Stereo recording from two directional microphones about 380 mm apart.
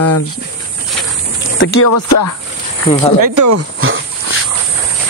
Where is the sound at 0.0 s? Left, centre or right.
Left.